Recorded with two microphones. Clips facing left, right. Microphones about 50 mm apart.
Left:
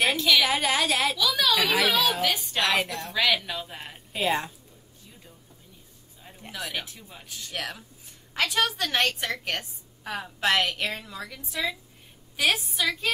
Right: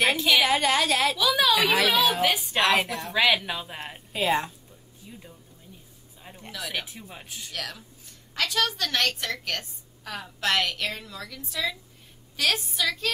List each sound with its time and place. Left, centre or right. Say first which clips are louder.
0.1 s a sound: even; centre
0.4 s a woman's voice: right 2 dB; centre
1.1 s a woman's voice: right 2 dB; centre
3.1 s a woman's voice: right 3 dB; centre
4.1 s a woman's voice: right 1 dB; centre
6.8 s speech: right 2 dB; centre
7.5 s a woman's voice: left 3 dB; centre